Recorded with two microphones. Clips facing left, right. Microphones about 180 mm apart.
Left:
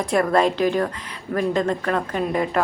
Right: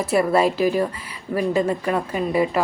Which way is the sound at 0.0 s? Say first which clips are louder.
Right 1 dB; 5° right (ahead or behind).